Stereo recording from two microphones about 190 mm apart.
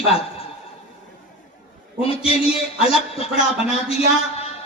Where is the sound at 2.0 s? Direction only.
30° left (ahead or behind).